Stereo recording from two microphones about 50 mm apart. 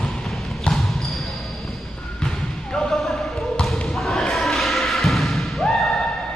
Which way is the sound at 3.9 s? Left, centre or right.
Centre.